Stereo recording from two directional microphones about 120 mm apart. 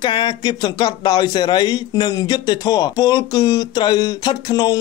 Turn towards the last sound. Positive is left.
turn(degrees=35)  # may be behind; listen again after turning